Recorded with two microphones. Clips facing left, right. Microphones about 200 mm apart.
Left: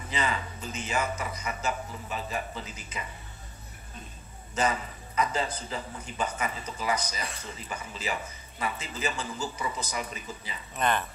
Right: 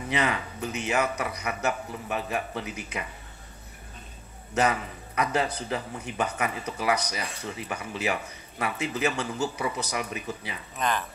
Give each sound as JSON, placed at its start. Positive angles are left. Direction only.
{"t": 0.1, "sound": "speech", "side_deg": -65}
{"t": 4.6, "sound": "speech", "side_deg": -65}
{"t": 10.8, "sound": "speech", "side_deg": 0}